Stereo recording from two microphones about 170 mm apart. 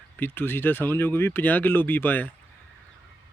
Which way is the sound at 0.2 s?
10° left (ahead or behind).